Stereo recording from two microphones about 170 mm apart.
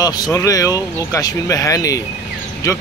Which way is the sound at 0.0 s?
20° left (ahead or behind).